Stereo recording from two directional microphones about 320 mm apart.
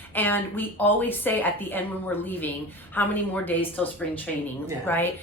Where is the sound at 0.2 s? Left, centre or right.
Centre.